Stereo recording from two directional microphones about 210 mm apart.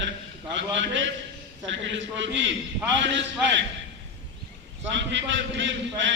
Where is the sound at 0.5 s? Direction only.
60° right (ahead or behind).